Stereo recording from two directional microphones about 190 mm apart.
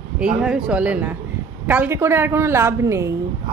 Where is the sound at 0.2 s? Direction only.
5° right (ahead or behind).